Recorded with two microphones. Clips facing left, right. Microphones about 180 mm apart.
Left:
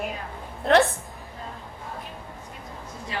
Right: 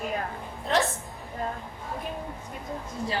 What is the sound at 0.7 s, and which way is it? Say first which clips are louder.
Speech: left 7 dB; 65° left (ahead or behind).